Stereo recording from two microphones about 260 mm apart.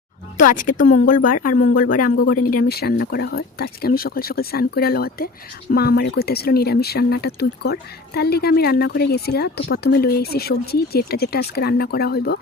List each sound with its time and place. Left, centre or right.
0.3 s speech: left